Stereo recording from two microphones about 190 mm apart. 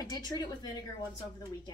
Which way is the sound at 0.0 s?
20° left (ahead or behind).